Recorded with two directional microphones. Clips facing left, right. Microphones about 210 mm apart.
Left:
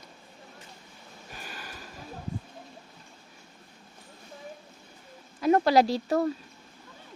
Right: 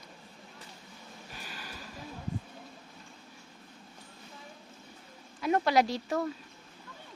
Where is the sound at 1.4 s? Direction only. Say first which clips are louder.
Left 4 dB; 50° left (ahead or behind).